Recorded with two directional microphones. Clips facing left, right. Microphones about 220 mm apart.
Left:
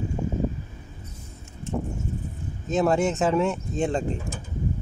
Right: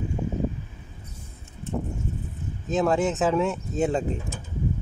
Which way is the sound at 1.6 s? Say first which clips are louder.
Left 1 dB; 35° right (ahead or behind).